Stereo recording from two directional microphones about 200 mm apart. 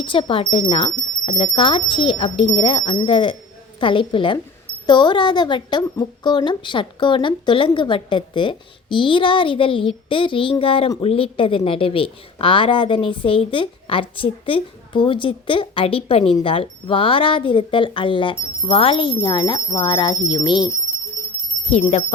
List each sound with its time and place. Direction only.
0.0 s a woman's voice: 25° left (ahead or behind)
21.7 s speech: 35° left (ahead or behind)